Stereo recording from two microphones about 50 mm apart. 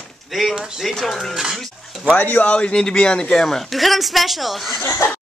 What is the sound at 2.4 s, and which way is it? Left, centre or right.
Speech, left.